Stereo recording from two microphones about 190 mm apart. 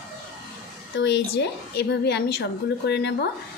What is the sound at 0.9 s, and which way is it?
A woman's voice, 70° left (ahead or behind).